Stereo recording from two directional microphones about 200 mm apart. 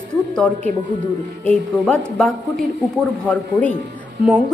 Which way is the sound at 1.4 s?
5° left (ahead or behind).